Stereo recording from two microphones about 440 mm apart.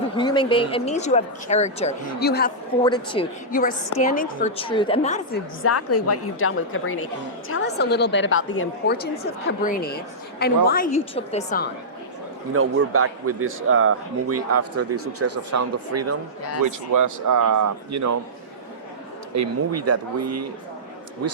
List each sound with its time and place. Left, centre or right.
0.2 s speech: centre
2.8 s speech: centre
5.6 s a woman's voice: left
12.5 s a man's voice: right
19.3 s speech: right